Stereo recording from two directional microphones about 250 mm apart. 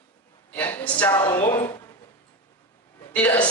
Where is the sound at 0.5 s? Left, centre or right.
Centre.